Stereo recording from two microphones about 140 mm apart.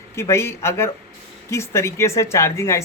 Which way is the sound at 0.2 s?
20° left (ahead or behind).